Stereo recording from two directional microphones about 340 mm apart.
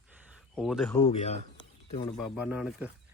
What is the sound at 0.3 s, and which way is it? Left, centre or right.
Speech, centre.